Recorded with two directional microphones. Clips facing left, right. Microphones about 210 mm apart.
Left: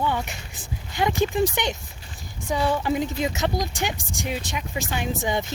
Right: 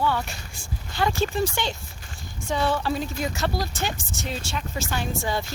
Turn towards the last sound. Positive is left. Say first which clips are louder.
# left 2 dB
turn(degrees=20)  # may be behind; listen again after turning